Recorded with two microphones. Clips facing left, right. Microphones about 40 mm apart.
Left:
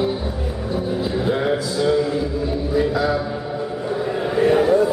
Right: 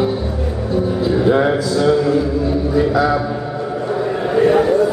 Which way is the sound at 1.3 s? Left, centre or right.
Right.